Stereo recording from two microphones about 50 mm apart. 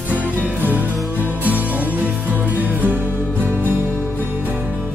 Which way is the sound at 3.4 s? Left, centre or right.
Left.